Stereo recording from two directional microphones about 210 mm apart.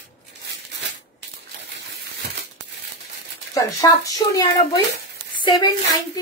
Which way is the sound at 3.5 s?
15° left (ahead or behind).